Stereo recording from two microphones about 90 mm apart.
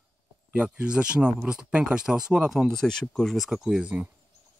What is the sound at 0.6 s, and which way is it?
Speech, 15° right (ahead or behind).